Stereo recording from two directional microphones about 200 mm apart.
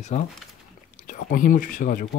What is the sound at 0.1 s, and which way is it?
Speech, 40° left (ahead or behind).